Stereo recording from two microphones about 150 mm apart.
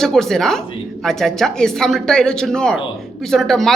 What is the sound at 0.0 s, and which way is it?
A woman's voice, 5° left (ahead or behind).